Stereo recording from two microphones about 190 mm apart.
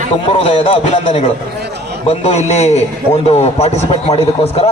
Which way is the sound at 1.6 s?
60° right (ahead or behind).